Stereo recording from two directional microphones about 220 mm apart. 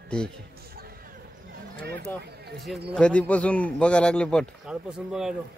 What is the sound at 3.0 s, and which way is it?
A man's voice, 5° left (ahead or behind).